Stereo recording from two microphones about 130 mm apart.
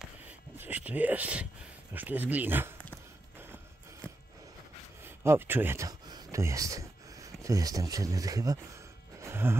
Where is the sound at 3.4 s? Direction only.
20° right (ahead or behind).